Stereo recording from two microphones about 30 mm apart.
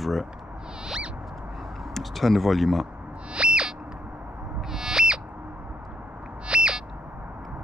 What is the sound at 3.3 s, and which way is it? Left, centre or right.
Owl, right.